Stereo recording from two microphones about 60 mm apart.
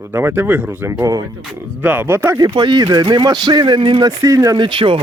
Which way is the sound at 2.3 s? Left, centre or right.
Right.